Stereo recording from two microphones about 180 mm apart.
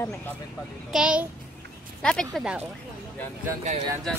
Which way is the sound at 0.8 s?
5° right (ahead or behind).